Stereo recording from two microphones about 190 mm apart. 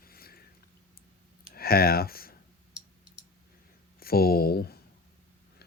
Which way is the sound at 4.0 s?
55° left (ahead or behind).